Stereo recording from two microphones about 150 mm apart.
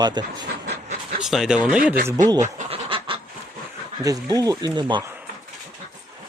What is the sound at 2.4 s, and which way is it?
Goose, 40° right (ahead or behind).